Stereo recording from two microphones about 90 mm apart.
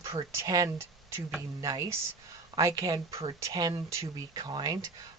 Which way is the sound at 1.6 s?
40° right (ahead or behind).